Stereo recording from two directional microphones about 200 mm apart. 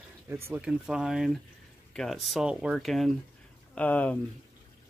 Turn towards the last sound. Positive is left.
turn(degrees=10)  # may be behind; listen again after turning